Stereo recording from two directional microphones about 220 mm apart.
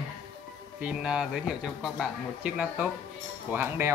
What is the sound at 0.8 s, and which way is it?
Speech, 5° right (ahead or behind).